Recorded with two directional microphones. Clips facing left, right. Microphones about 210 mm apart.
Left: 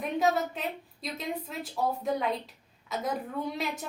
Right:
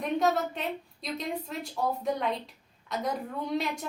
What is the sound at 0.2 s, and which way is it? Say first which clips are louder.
A woman's voice: left 3 dB; centre (ahead or behind).